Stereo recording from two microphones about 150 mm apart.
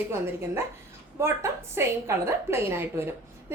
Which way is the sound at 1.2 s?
15° right (ahead or behind).